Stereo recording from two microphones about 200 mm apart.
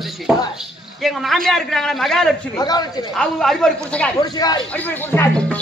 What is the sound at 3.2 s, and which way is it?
Speech, 5° left (ahead or behind).